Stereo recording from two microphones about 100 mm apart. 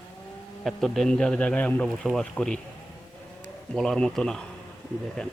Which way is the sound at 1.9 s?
Centre (ahead or behind).